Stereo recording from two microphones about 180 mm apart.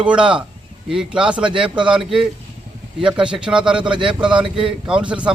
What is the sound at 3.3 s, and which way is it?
Speech, 5° right (ahead or behind).